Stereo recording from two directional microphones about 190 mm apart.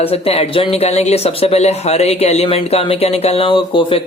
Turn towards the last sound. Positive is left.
turn(degrees=25)  # may be behind; listen again after turning